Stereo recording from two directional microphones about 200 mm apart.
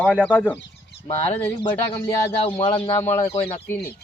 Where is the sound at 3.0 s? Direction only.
10° left (ahead or behind).